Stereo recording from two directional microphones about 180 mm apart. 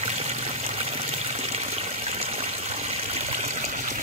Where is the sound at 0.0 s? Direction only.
35° right (ahead or behind).